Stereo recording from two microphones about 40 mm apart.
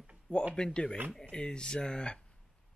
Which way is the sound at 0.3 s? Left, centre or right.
Centre.